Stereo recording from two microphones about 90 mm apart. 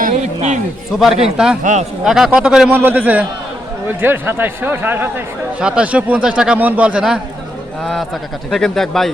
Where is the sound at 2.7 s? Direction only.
20° right (ahead or behind).